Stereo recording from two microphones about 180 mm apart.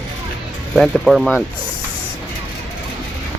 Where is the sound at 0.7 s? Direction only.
Centre (ahead or behind).